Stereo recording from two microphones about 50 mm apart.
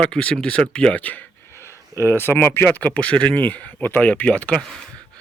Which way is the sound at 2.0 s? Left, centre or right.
Left.